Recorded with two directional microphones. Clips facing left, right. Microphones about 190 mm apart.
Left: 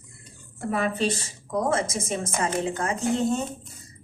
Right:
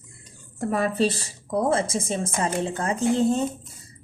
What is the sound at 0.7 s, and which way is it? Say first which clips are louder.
A woman's voice: right 2 dB; 40° right (ahead or behind).